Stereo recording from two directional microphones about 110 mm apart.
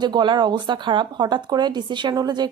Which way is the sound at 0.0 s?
45° right (ahead or behind).